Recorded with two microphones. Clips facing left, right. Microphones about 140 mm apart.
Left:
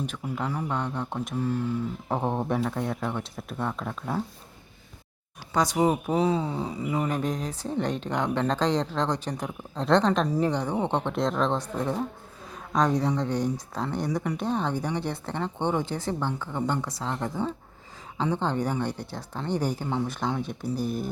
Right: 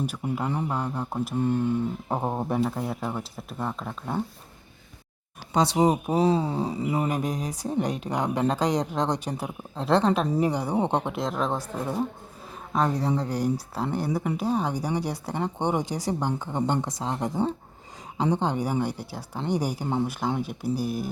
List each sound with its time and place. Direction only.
0.0 s speech: 10° right (ahead or behind)
1.4 s speech: 20° right (ahead or behind)
2.0 s speech: 5° right (ahead or behind)
5.5 s speech: 30° right (ahead or behind)
5.8 s speech: 15° right (ahead or behind)
6.1 s speech: 35° right (ahead or behind)
7.1 s speech: 10° right (ahead or behind)
11.1 s speech: 5° right (ahead or behind)